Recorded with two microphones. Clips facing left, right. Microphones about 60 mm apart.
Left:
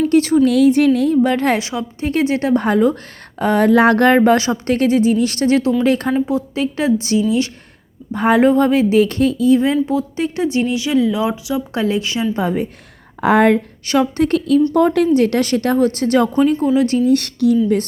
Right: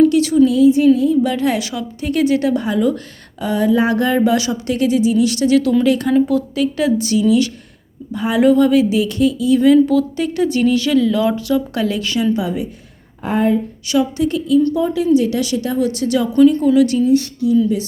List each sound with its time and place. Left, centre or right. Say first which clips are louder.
0.1 s a sound: left 1 dB; left
0.4 s speech: right 1 dB; left
1.2 s speech: left 2 dB; left
1.5 s a woman's voice: left 1 dB; left
6.1 s speech: right 3 dB; left
8.1 s speech: left 1 dB; left
9.8 s speech: right 3 dB; left
11.7 s speech: even; left
12.4 s speech: left 2 dB; left
13.2 s speech: left 4 dB; left
13.8 s a woman's voice: left 2 dB; left
17.1 s speech: even; left